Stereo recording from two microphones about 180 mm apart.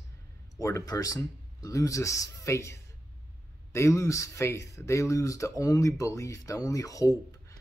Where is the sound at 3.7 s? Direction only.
15° left (ahead or behind).